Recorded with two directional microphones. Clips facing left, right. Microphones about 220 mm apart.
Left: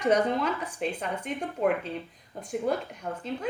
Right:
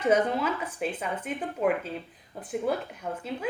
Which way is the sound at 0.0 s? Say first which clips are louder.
Even; 5° right (ahead or behind).